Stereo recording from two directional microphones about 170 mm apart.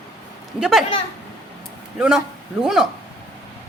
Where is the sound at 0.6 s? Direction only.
5° right (ahead or behind).